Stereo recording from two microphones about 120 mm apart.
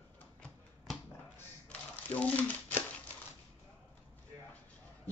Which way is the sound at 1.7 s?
10° left (ahead or behind).